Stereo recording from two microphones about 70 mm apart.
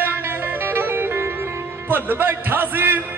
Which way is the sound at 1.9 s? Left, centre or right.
Right.